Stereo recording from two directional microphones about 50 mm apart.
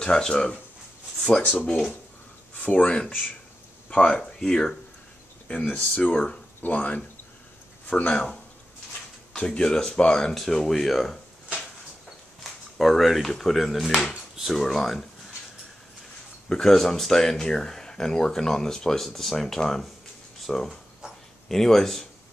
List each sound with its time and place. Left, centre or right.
0.0 s speech: centre
2.6 s speech: left
4.2 s speech: centre
5.5 s speech: left
9.4 s speech: centre
10.3 s speech: centre
12.7 s speech: centre
16.4 s speech: centre